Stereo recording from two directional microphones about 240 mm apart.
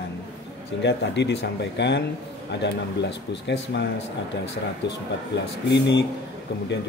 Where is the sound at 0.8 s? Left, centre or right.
Left.